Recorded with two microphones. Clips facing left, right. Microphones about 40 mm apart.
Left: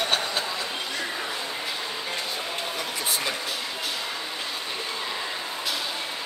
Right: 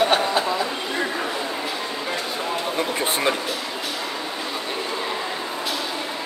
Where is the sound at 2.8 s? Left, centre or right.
Right.